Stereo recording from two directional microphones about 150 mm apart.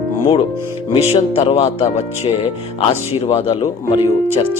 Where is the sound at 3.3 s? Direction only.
40° left (ahead or behind).